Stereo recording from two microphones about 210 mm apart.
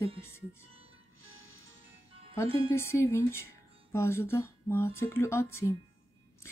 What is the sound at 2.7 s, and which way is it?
Speech, 10° left (ahead or behind).